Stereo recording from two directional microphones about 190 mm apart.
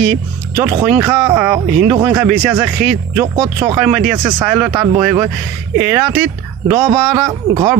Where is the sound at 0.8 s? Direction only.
15° right (ahead or behind).